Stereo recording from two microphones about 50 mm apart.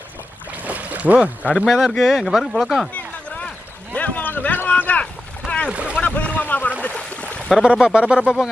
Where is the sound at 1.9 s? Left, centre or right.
Centre.